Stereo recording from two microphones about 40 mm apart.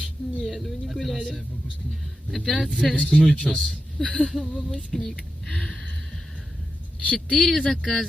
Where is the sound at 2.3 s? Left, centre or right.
Centre.